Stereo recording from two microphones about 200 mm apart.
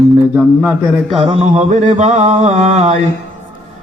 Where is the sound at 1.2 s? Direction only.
30° right (ahead or behind).